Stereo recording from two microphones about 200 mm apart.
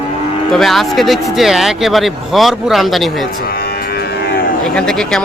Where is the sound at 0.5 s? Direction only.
Centre (ahead or behind).